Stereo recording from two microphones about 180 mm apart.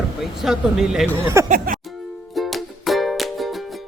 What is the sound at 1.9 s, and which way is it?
Music, centre (ahead or behind).